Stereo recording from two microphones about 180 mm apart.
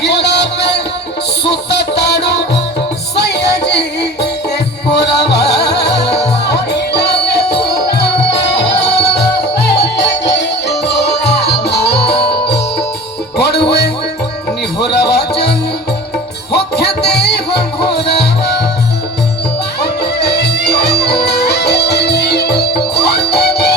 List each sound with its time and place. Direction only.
0.0 s music: 70° left (ahead or behind)
4.9 s music: 70° left (ahead or behind)
19.8 s music: 65° left (ahead or behind)